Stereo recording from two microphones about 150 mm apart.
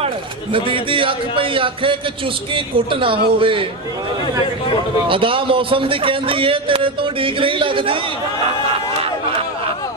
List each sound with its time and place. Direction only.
0.0 s a man's voice: 35° right (ahead or behind)
5.0 s a man's voice: 35° right (ahead or behind)